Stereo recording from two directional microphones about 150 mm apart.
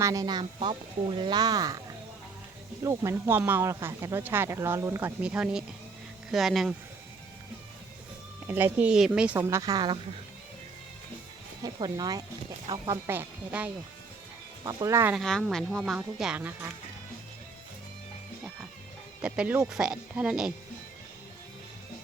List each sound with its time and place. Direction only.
0.0 s speech: 25° right (ahead or behind)
2.8 s speech: 20° right (ahead or behind); by 6.7 s centre (ahead or behind)
8.4 s speech: 10° right (ahead or behind)
9.4 s speech: 20° right (ahead or behind)
11.6 s speech: 25° right (ahead or behind)
13.1 s speech: 10° right (ahead or behind)
14.6 s speech: 25° right (ahead or behind)
15.1 s speech: centre (ahead or behind)
19.2 s speech: 5° right (ahead or behind)